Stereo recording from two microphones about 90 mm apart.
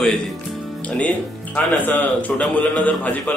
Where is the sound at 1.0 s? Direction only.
15° left (ahead or behind).